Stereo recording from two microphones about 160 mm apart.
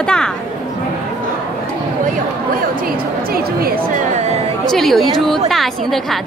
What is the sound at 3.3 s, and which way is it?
Speech, 70° right (ahead or behind).